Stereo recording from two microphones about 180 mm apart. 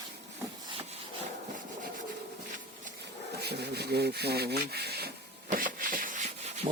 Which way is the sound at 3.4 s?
65° right (ahead or behind).